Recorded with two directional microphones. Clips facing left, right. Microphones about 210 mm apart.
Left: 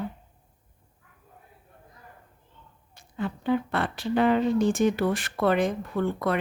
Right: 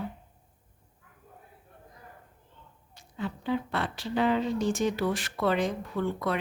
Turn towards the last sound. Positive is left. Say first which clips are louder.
# left 3 dB
turn(degrees=55)  # may be behind; listen again after turning